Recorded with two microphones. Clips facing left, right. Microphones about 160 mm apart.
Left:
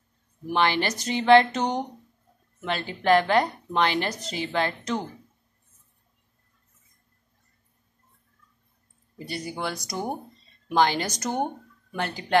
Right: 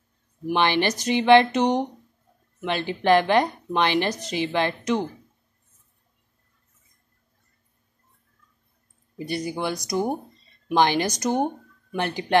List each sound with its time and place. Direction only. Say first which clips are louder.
0.5 s a woman's voice: right 2 dB; 20° right (ahead or behind)
9.3 s speech: right 4 dB; 15° right (ahead or behind)